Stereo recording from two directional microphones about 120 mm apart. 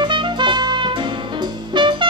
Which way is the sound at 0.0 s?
40° right (ahead or behind).